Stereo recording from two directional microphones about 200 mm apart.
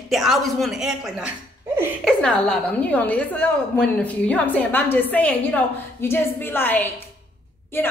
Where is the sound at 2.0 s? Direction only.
5° left (ahead or behind).